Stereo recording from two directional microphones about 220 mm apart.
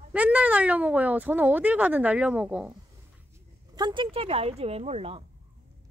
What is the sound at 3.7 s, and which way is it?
A woman's voice, 20° right (ahead or behind).